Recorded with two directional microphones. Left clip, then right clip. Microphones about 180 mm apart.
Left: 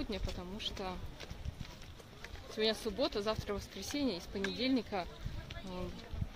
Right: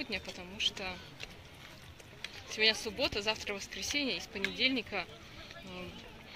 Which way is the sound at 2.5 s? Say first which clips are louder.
Right 5 dB; 65° left (ahead or behind).